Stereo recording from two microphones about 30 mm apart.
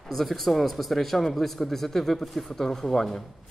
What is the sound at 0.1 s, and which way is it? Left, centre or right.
Speech, centre.